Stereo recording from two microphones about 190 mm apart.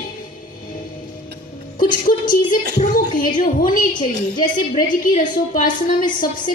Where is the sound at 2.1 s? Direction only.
50° left (ahead or behind).